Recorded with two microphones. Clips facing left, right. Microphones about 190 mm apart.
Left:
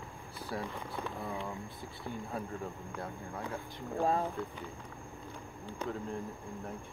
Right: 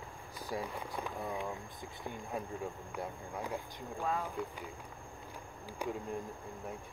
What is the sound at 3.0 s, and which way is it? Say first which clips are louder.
Speech: right 1 dB; 15° right (ahead or behind).